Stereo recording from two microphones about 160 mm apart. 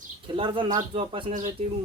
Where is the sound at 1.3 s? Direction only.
55° right (ahead or behind).